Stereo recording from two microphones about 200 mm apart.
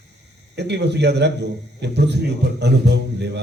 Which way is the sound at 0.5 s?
55° right (ahead or behind).